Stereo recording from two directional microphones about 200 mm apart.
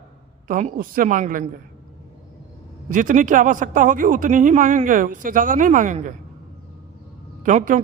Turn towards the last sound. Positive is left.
turn(degrees=-40)  # may be behind; listen again after turning